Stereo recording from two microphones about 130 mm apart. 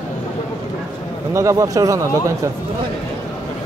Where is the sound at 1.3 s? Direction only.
25° right (ahead or behind).